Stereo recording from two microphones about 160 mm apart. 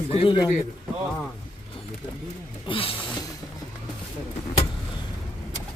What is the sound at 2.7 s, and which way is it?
Speech, 35° left (ahead or behind).